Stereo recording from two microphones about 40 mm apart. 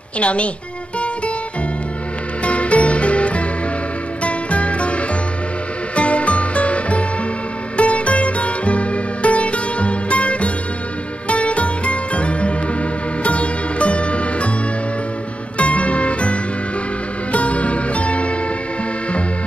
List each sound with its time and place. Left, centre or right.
0.2 s speech: left
2.4 s music: left
15.5 s music: left